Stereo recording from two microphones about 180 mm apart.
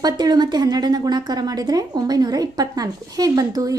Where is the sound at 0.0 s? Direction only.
20° right (ahead or behind).